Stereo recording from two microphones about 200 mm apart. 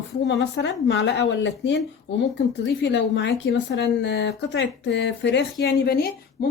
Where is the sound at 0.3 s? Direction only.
60° left (ahead or behind).